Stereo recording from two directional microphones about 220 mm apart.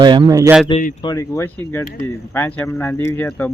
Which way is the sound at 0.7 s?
35° left (ahead or behind).